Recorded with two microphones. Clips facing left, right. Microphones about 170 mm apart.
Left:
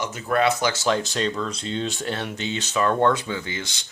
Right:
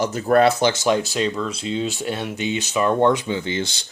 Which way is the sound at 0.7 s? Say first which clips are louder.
Right 3 dB; 15° right (ahead or behind).